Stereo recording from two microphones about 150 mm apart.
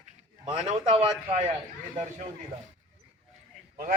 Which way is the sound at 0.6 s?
50° right (ahead or behind).